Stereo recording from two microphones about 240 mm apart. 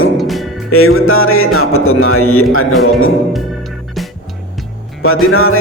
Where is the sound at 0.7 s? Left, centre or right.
Left.